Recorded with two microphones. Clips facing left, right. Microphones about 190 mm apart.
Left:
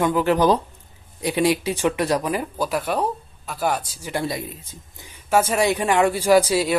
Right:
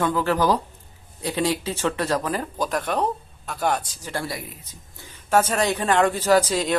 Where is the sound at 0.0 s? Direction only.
15° left (ahead or behind).